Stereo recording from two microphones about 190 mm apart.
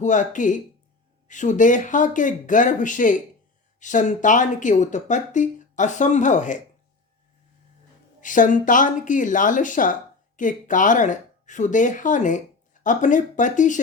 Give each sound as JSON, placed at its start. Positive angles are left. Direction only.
{"t": 0.0, "sound": "speech", "side_deg": 40}
{"t": 8.2, "sound": "speech", "side_deg": 45}